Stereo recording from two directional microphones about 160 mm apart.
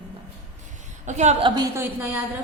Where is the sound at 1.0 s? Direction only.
45° right (ahead or behind).